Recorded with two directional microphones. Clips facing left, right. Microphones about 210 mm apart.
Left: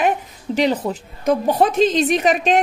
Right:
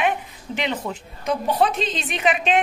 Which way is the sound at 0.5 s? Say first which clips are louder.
Left 8 dB; 40° left (ahead or behind).